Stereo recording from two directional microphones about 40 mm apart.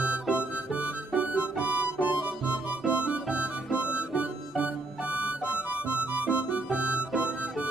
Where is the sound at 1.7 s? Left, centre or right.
Right.